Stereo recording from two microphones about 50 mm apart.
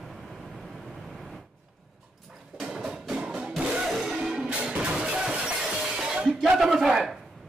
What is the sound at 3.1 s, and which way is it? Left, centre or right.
Music, centre.